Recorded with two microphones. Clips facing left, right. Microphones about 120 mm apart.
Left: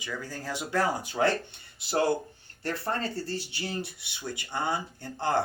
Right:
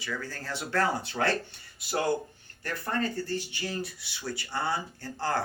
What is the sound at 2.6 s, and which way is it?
Speech, 30° left (ahead or behind).